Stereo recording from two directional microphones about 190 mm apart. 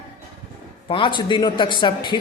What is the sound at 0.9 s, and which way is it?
A man's voice, 25° left (ahead or behind).